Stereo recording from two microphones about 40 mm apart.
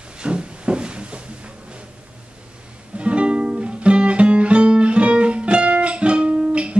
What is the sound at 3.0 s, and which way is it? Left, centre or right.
Music, right.